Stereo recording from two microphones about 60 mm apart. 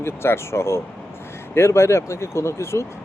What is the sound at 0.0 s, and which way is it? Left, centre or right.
Speech, left.